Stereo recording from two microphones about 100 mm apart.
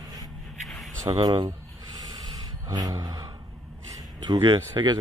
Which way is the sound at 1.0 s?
40° right (ahead or behind).